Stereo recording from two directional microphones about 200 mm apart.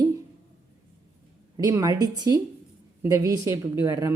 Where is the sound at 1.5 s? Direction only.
20° right (ahead or behind).